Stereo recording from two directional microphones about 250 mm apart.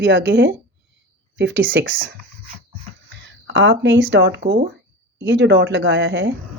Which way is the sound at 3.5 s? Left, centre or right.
Right.